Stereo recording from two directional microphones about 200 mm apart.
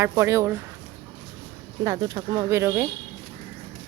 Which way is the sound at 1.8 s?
20° right (ahead or behind).